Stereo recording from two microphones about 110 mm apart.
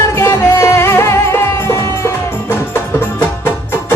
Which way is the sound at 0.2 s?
25° left (ahead or behind).